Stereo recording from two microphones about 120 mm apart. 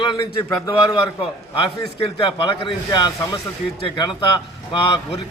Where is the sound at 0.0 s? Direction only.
40° left (ahead or behind).